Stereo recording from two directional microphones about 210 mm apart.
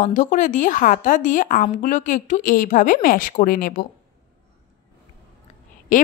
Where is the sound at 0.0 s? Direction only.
35° left (ahead or behind).